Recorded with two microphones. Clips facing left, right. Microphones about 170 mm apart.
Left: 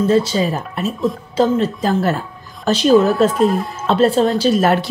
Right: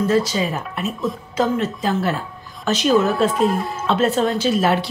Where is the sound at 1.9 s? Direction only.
40° left (ahead or behind).